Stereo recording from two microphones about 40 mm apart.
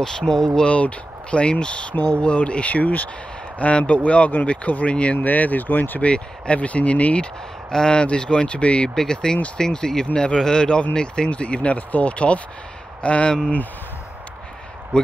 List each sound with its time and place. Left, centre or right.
0.0 s speech: centre
0.7 s speech: left
5.2 s speech: left
5.9 s speech: left
7.7 s speech: left
8.9 s speech: centre